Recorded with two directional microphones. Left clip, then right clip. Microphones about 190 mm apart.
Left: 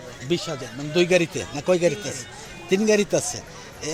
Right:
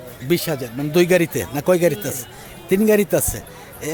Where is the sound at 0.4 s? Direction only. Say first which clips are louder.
Right 6 dB; 35° right (ahead or behind).